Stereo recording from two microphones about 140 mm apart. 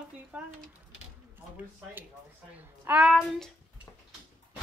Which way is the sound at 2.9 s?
15° right (ahead or behind).